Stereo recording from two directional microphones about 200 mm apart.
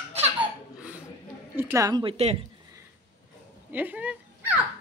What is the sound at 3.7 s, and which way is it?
Turkey, 10° right (ahead or behind).